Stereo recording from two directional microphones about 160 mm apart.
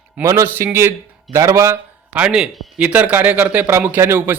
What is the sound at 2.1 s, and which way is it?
Speech, 5° right (ahead or behind).